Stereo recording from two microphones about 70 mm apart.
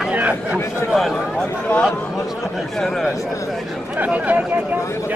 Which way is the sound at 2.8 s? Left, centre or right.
Centre.